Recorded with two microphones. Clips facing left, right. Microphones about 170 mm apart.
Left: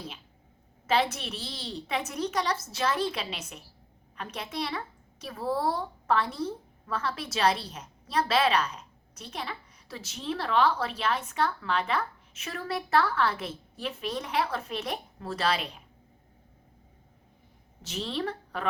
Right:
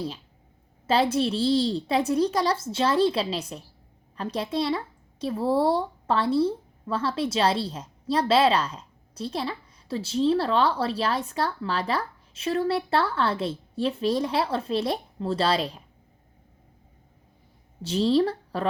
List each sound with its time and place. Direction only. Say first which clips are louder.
0.9 s a woman's voice: right 5 dB; 30° right (ahead or behind)
17.8 s a woman's voice: right 11 dB; 35° right (ahead or behind)